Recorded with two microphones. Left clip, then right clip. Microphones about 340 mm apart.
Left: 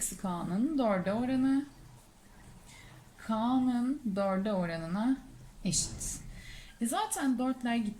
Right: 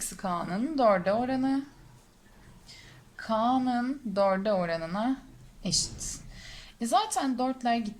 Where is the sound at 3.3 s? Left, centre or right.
Centre.